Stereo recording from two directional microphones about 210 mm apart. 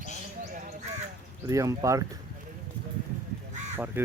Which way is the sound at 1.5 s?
15° right (ahead or behind).